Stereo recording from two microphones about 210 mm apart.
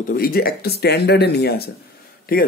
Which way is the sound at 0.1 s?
45° left (ahead or behind).